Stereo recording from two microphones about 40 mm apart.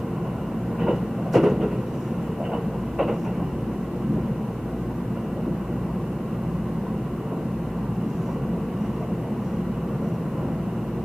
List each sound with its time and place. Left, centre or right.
0.8 s train: centre